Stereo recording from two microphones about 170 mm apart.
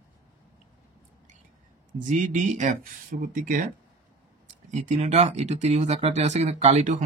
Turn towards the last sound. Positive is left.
turn(degrees=-40)  # may be behind; listen again after turning